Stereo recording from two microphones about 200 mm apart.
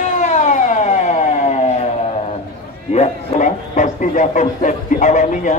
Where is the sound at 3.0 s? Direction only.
35° left (ahead or behind).